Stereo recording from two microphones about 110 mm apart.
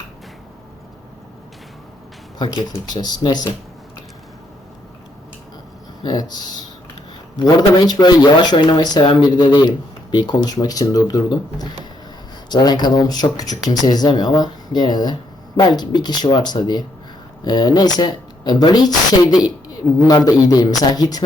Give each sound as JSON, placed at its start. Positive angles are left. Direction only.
{"t": 2.4, "sound": "speech", "side_deg": 40}
{"t": 6.0, "sound": "speech", "side_deg": 40}
{"t": 7.4, "sound": "speech", "side_deg": 35}